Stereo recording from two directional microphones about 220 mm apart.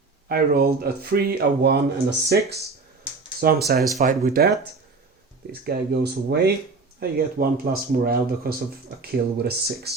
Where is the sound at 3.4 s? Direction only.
45° right (ahead or behind).